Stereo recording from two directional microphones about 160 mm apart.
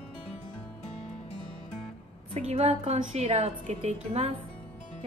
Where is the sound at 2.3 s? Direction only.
40° right (ahead or behind).